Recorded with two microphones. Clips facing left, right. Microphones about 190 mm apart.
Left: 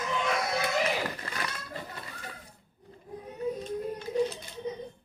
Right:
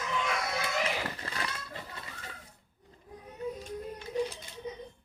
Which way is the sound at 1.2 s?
30° right (ahead or behind).